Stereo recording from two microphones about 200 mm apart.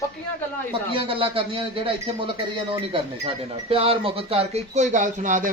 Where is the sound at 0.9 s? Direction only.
25° right (ahead or behind).